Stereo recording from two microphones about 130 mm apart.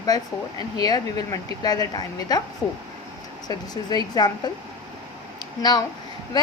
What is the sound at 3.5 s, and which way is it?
A woman's voice, 30° left (ahead or behind).